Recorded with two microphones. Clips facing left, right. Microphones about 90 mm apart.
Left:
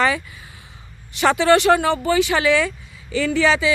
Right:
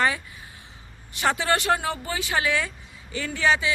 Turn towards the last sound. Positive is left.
turn(degrees=90)